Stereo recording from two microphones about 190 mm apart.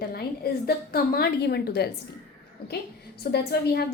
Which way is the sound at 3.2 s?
55° left (ahead or behind).